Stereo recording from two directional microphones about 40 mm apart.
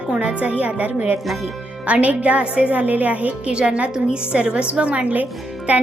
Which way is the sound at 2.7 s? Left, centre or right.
Right.